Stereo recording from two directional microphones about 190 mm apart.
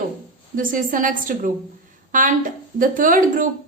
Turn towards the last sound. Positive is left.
turn(degrees=-45)  # may be behind; listen again after turning